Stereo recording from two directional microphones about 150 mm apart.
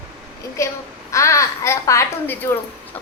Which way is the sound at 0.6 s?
20° left (ahead or behind).